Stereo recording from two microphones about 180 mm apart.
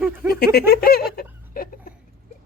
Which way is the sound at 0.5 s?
60° left (ahead or behind).